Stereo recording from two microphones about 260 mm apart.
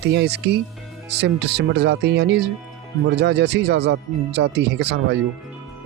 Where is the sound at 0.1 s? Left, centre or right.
Right.